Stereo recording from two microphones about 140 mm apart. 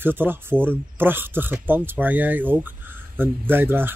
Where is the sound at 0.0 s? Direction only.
15° right (ahead or behind).